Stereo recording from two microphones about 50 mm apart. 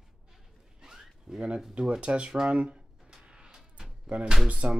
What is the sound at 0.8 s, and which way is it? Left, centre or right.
Zipper, centre.